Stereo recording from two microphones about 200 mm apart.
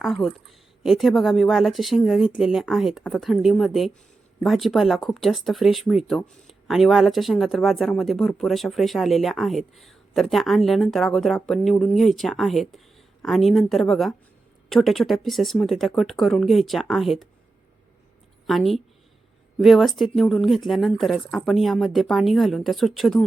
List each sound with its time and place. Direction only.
0.0 s speech: centre (ahead or behind)
18.4 s speech: centre (ahead or behind)